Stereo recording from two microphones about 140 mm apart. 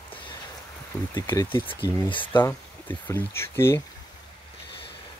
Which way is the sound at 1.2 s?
20° left (ahead or behind).